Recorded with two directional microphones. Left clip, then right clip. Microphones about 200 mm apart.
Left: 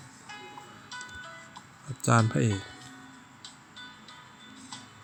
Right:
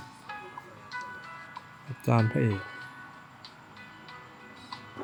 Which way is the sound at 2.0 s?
15° left (ahead or behind).